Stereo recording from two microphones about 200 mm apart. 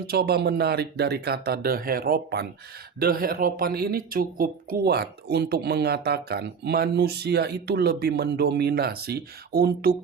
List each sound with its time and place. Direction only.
0.1 s speech: 50° right (ahead or behind)